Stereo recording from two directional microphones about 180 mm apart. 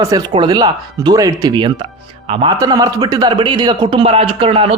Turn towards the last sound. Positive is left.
turn(degrees=-30)  # may be behind; listen again after turning